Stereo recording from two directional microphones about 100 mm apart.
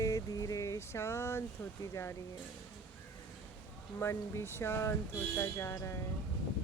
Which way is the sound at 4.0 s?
25° left (ahead or behind).